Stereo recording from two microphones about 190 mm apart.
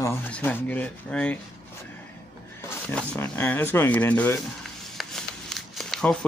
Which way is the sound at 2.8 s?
5° left (ahead or behind).